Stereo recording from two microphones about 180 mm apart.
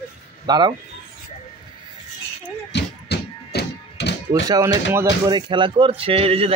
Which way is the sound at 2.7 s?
65° left (ahead or behind).